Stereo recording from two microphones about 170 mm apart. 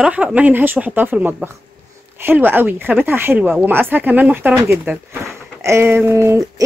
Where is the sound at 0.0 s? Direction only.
5° right (ahead or behind).